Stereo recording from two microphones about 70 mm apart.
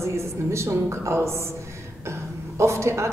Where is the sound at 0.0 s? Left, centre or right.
Right.